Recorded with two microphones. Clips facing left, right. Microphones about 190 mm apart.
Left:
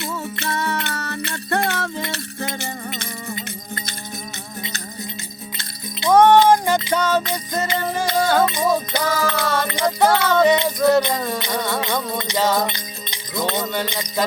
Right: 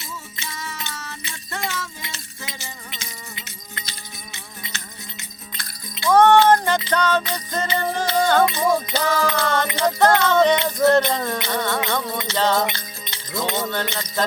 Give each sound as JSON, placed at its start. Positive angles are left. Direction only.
{"t": 0.0, "sound": "music", "side_deg": 65}
{"t": 5.5, "sound": "music", "side_deg": 20}
{"t": 11.9, "sound": "mantra", "side_deg": 15}
{"t": 12.3, "sound": "music", "side_deg": 10}